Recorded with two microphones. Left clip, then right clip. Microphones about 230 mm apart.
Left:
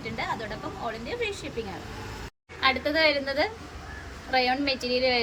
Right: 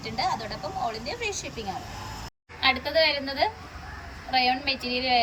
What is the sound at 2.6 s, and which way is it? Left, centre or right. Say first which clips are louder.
A woman's voice: even; centre.